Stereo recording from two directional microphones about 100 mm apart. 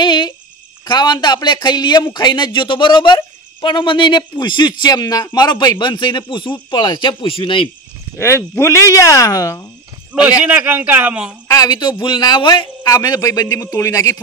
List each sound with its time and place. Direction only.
0.0 s speech: 50° left (ahead or behind)
8.2 s speech: 25° left (ahead or behind)
10.4 s speech: 15° right (ahead or behind)
11.4 s speech: 35° left (ahead or behind)
12.8 s speech: 40° left (ahead or behind)